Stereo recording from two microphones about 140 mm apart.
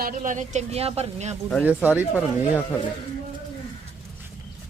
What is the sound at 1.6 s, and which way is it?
Speech, 10° right (ahead or behind).